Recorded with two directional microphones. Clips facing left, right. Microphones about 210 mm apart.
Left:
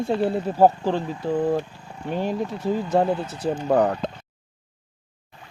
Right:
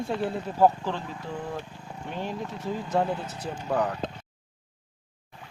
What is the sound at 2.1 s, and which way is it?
Speech, 35° left (ahead or behind).